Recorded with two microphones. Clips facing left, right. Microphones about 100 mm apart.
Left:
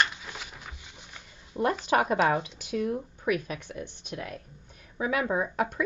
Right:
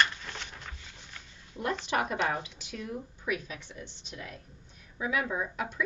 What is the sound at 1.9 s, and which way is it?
Speech, 50° left (ahead or behind).